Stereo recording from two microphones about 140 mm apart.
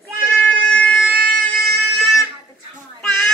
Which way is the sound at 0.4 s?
10° left (ahead or behind).